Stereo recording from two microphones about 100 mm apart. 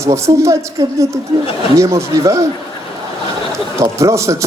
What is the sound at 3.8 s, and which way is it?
Speech, 30° right (ahead or behind).